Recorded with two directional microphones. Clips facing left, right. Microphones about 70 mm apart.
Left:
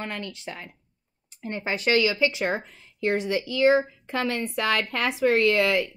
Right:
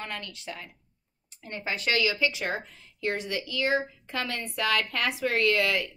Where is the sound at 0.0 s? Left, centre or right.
Left.